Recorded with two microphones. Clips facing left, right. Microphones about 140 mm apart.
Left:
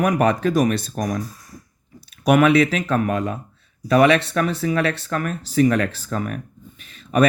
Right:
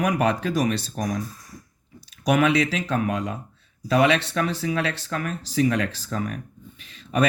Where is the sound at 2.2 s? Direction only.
60° left (ahead or behind).